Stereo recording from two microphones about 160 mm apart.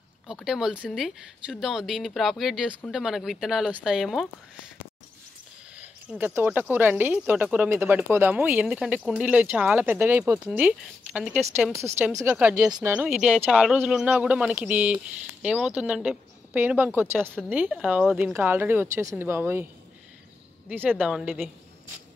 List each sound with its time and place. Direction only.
0.3 s speech: 5° right (ahead or behind)
5.8 s speech: 10° right (ahead or behind)
11.7 s a woman's voice: 20° right (ahead or behind); by 21.5 s centre (ahead or behind)